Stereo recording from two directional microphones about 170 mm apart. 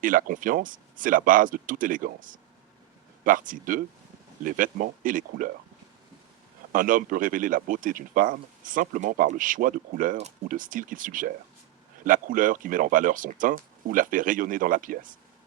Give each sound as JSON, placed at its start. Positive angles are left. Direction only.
{"t": 0.0, "sound": "speech", "side_deg": -55}
{"t": 6.7, "sound": "speech", "side_deg": -55}